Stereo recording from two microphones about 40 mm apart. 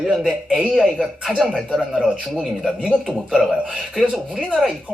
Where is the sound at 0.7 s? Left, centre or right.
Centre.